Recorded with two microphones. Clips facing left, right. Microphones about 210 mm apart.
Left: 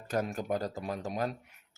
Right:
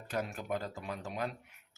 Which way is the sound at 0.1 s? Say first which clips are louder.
Left 5 dB; 40° left (ahead or behind).